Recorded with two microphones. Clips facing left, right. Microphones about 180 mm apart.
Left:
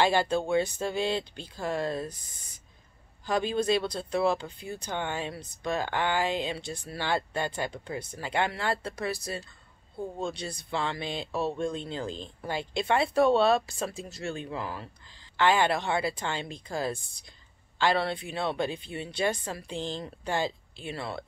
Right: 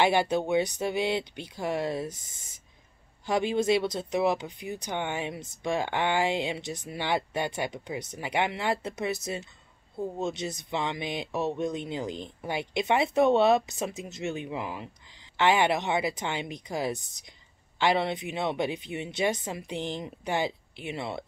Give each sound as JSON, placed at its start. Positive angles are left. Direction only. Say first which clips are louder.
{"t": 0.0, "sound": "speech", "louder": "right 1 dB", "side_deg": -20}
{"t": 9.9, "sound": "speech", "louder": "right 3 dB", "side_deg": -5}
{"t": 10.2, "sound": "speech", "louder": "right 2 dB", "side_deg": -20}